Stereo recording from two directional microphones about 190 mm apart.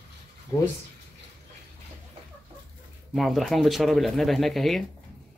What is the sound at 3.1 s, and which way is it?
Speech, centre (ahead or behind).